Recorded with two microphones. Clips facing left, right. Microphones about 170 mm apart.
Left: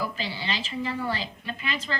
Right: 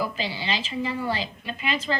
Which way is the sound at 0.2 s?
25° right (ahead or behind).